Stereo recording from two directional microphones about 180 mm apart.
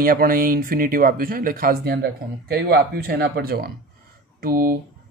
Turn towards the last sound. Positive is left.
turn(degrees=-55)  # may be behind; listen again after turning